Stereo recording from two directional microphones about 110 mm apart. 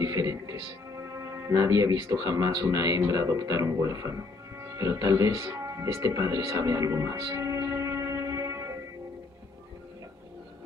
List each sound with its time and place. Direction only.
0.0 s music: 30° right (ahead or behind)
2.1 s speech: 30° right (ahead or behind)
7.3 s music: 30° right (ahead or behind)